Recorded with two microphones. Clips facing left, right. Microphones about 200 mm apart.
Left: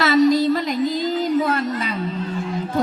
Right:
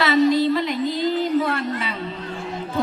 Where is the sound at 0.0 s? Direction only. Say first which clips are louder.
Left 2 dB; 40° left (ahead or behind).